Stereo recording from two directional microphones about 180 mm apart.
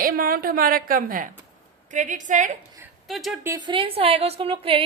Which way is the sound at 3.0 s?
Centre (ahead or behind).